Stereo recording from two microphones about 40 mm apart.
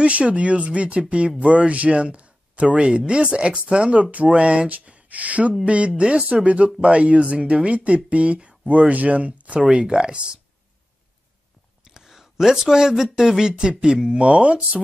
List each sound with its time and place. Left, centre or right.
0.0 s a man's voice: right
11.8 s speech: centre; by 14.6 s right